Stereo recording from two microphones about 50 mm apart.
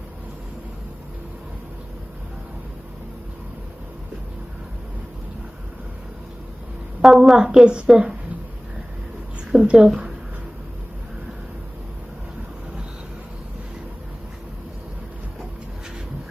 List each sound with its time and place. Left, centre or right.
7.0 s a woman's voice: centre
7.3 s a woman's voice: centre
9.5 s a woman's voice: centre